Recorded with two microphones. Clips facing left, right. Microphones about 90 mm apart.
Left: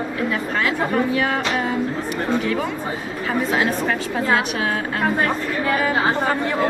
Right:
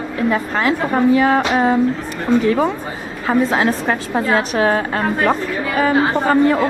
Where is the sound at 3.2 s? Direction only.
35° right (ahead or behind).